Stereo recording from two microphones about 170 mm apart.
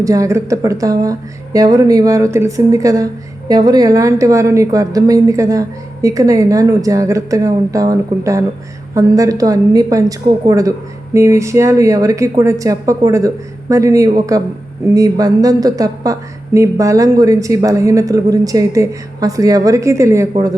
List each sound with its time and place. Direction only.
0.0 s a woman's voice: 20° right (ahead or behind)